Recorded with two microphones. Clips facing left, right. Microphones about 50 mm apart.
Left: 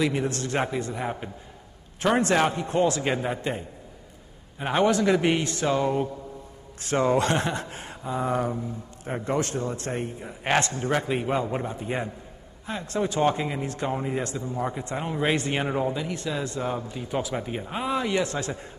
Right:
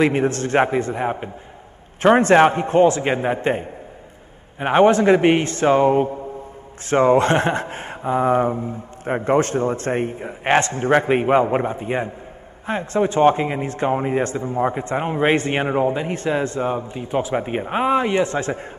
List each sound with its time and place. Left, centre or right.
0.0 s speech: right